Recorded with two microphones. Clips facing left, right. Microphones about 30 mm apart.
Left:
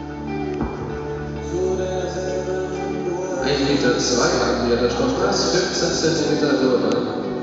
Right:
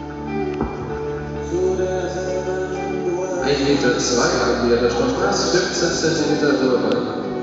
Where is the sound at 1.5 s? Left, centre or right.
Centre.